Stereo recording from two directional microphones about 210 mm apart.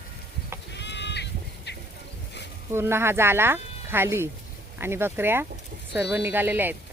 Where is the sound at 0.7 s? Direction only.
55° left (ahead or behind).